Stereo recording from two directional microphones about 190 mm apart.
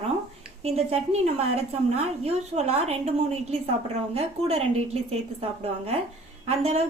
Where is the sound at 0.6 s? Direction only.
35° right (ahead or behind).